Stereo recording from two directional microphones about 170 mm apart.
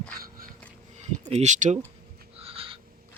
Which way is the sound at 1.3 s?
40° right (ahead or behind).